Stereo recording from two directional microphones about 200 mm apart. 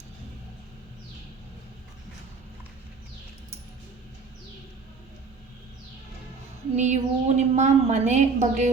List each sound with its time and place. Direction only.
6.7 s a woman's voice: 35° right (ahead or behind)